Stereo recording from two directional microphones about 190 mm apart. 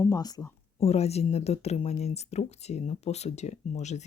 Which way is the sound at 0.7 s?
35° left (ahead or behind).